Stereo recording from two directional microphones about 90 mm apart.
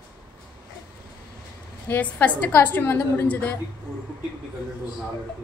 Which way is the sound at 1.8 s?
20° left (ahead or behind).